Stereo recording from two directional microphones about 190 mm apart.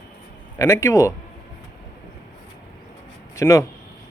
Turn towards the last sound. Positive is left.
turn(degrees=15)  # may be behind; listen again after turning